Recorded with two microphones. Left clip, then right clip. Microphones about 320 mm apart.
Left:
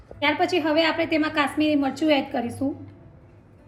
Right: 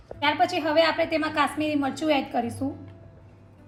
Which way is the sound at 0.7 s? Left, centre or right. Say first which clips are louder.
Even; right.